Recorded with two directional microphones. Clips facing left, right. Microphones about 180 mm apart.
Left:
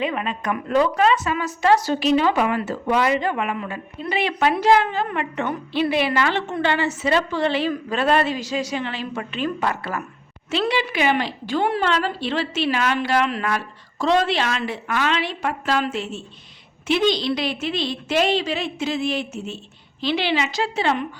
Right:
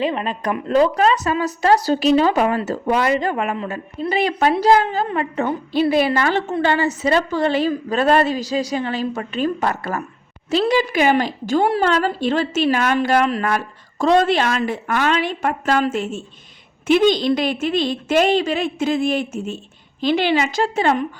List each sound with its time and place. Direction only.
0.0 s a woman's voice: 30° right (ahead or behind); by 21.1 s 45° right (ahead or behind)